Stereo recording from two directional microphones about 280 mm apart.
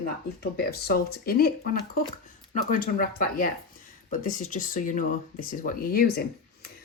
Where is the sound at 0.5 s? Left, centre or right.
Left.